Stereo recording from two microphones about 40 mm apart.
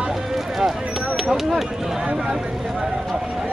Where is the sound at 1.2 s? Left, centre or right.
Centre.